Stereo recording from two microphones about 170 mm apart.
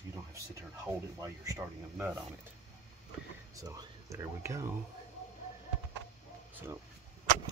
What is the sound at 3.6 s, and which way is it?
A man's voice, 20° right (ahead or behind).